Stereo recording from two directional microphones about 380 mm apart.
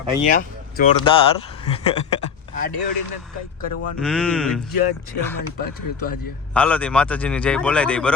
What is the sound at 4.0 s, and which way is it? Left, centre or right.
Speech, centre.